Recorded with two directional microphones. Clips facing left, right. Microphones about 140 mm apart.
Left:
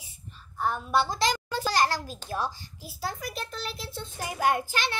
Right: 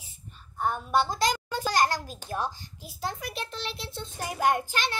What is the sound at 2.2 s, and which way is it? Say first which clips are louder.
Speech: even; 15° right (ahead or behind).